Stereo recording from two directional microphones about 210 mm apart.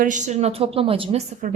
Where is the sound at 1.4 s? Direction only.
40° right (ahead or behind).